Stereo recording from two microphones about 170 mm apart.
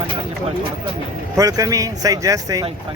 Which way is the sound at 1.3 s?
20° right (ahead or behind).